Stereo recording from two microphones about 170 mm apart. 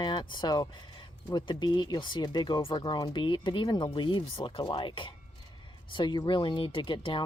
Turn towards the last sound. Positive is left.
turn(degrees=30)  # may be behind; listen again after turning